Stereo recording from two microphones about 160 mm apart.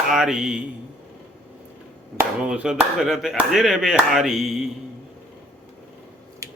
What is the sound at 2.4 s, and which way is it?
Speech, 5° right (ahead or behind).